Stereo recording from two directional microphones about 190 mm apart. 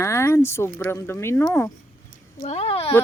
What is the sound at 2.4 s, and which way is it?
Speech, 35° left (ahead or behind).